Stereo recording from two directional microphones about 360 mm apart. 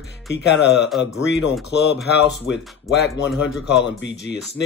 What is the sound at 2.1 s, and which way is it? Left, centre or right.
Speech, left.